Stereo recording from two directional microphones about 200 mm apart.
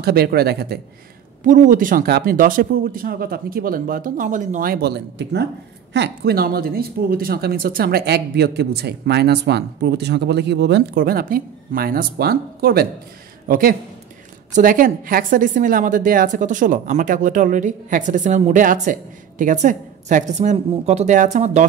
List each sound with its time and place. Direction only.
0.0 s speech: 50° right (ahead or behind)
1.4 s a woman's voice: 40° right (ahead or behind)